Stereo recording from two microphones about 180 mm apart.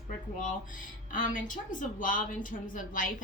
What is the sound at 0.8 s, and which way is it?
A woman's voice, 45° left (ahead or behind).